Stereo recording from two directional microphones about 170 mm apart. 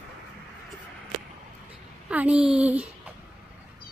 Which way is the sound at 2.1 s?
10° right (ahead or behind).